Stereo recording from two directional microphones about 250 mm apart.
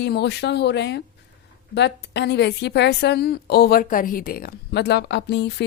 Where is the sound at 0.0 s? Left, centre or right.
Left.